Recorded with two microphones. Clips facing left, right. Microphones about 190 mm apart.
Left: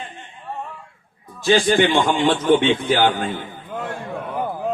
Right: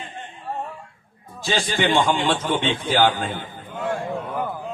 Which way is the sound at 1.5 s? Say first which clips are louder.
Left 6 dB; 55° left (ahead or behind).